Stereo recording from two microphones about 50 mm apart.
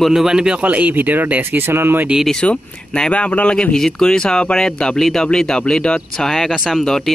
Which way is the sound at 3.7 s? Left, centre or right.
Centre.